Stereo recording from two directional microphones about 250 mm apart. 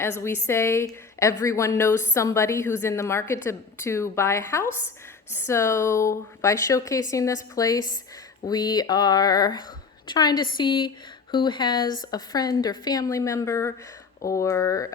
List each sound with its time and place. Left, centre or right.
0.0 s a woman's voice: centre